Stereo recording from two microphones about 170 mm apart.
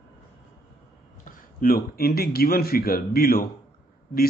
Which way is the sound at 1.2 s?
60° left (ahead or behind).